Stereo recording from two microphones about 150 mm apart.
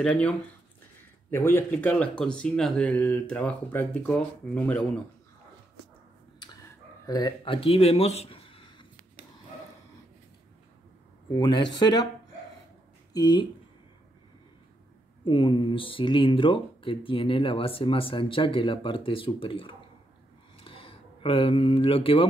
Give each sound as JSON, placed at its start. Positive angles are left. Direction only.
{"t": 0.0, "sound": "speech", "side_deg": 5}
{"t": 1.3, "sound": "speech", "side_deg": 15}
{"t": 7.1, "sound": "speech", "side_deg": 25}
{"t": 11.3, "sound": "speech", "side_deg": 30}
{"t": 13.1, "sound": "speech", "side_deg": 25}
{"t": 15.2, "sound": "speech", "side_deg": 35}
{"t": 20.5, "sound": "a sound", "side_deg": 35}